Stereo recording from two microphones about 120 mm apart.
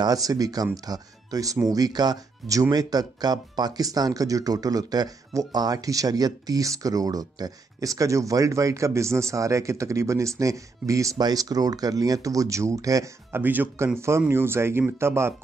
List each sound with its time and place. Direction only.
0.0 s speech: 30° right (ahead or behind)
13.4 s speech: 15° right (ahead or behind)